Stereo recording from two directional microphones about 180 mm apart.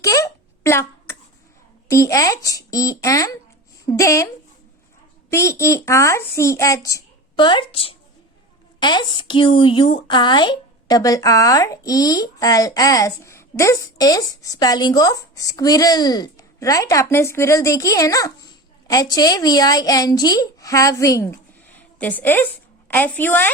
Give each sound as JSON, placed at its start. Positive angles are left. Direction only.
{"t": 0.0, "sound": "babbling", "side_deg": 20}
{"t": 1.9, "sound": "speech", "side_deg": 15}
{"t": 5.3, "sound": "speech", "side_deg": 15}